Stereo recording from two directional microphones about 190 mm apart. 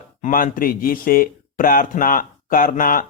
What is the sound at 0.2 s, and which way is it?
Speech, 45° left (ahead or behind).